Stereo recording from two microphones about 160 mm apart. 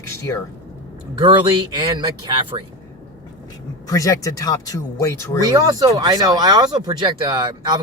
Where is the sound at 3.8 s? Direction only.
20° left (ahead or behind).